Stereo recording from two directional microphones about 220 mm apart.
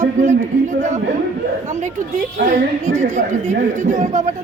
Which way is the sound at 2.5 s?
35° right (ahead or behind).